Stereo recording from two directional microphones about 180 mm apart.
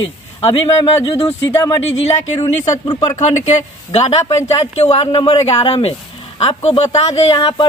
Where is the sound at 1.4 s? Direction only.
15° left (ahead or behind).